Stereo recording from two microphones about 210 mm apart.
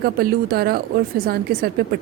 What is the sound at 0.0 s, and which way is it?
A woman's voice, 45° right (ahead or behind).